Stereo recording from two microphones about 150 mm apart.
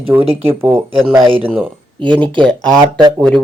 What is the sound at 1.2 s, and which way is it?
Speech, 35° right (ahead or behind).